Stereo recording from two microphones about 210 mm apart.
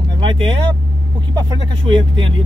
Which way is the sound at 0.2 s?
25° right (ahead or behind).